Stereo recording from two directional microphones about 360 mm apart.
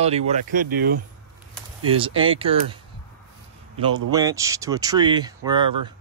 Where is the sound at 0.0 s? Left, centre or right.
Centre.